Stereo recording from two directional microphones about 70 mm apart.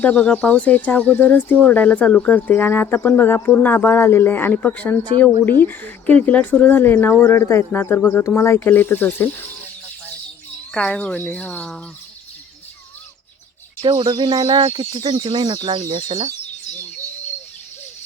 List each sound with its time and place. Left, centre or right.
0.0 s speech: centre
7.2 s speech: left
7.7 s speech: left
10.8 s speech: centre
13.9 s speech: right